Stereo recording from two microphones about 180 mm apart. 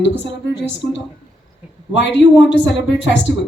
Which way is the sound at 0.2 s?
75° left (ahead or behind).